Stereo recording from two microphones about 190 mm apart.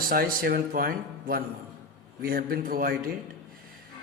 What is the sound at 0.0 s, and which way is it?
Speech, 50° right (ahead or behind).